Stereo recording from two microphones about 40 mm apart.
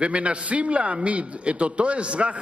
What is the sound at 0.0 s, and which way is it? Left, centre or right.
A man's voice, right.